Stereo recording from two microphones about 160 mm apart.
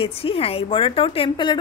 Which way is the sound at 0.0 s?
35° left (ahead or behind).